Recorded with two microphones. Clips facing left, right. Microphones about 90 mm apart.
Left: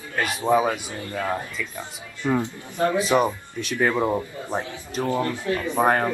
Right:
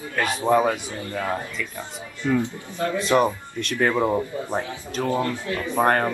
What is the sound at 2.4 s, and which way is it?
Speech, 20° left (ahead or behind).